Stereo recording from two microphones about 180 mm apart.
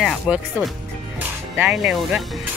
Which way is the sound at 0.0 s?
Centre (ahead or behind).